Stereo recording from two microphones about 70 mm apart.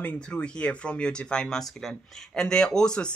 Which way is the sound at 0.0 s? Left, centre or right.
Centre.